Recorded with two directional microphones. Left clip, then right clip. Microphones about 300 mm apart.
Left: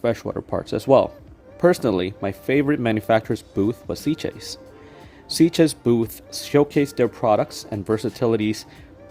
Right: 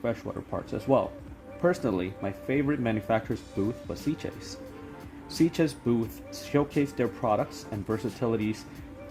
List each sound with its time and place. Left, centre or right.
0.0 s speech: left